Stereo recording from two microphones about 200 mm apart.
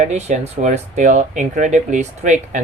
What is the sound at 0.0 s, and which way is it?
Speech, 35° right (ahead or behind).